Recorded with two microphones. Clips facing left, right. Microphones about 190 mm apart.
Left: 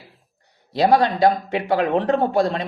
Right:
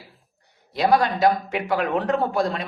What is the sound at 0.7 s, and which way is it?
Speech, 25° left (ahead or behind).